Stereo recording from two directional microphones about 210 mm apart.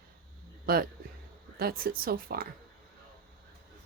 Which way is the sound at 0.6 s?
45° right (ahead or behind).